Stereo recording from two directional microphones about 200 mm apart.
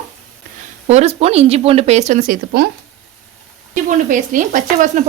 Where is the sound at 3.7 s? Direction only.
40° right (ahead or behind).